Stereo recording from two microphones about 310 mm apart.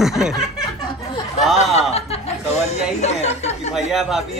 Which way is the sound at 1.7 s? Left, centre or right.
Centre.